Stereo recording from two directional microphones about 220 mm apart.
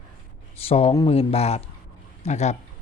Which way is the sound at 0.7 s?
25° left (ahead or behind).